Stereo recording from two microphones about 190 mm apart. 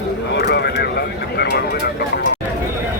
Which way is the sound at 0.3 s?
60° left (ahead or behind).